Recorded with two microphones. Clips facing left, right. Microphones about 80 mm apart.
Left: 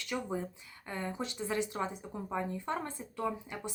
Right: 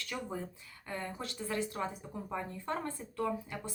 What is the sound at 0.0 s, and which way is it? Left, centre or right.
Speech, centre.